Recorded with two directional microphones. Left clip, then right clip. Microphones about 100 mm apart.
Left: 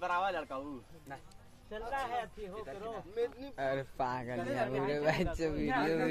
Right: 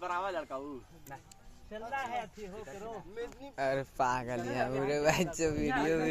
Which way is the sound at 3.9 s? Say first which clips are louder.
Right 4 dB; 40° right (ahead or behind).